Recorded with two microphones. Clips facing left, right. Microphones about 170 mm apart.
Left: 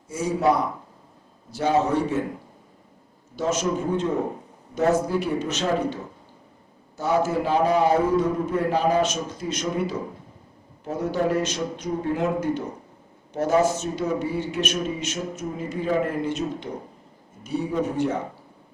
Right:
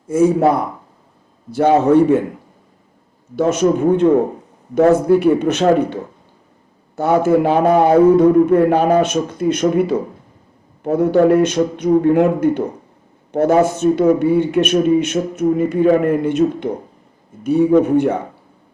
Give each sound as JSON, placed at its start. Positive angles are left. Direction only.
{"t": 0.1, "sound": "a man's voice", "side_deg": -55}
{"t": 3.3, "sound": "a man's voice", "side_deg": -60}